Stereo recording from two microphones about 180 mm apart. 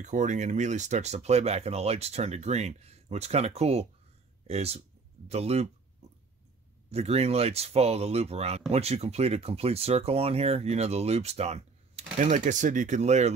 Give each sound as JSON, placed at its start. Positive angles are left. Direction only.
{"t": 0.0, "sound": "speech", "side_deg": -40}
{"t": 6.9, "sound": "speech", "side_deg": -35}